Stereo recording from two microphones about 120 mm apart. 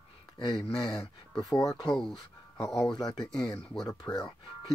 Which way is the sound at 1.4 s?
30° left (ahead or behind).